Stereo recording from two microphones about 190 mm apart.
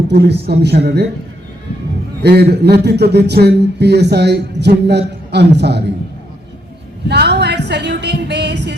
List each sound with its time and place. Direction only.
0.1 s speech: 60° right (ahead or behind)
2.2 s speech: 60° right (ahead or behind)
7.1 s a sound: 60° right (ahead or behind)